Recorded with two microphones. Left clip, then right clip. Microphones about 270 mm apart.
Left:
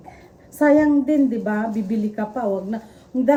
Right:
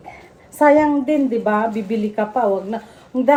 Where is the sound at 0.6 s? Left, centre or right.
Right.